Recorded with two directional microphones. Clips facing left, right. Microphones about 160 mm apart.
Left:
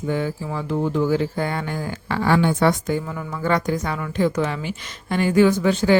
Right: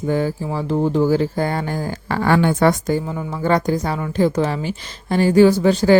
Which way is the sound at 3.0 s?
25° right (ahead or behind).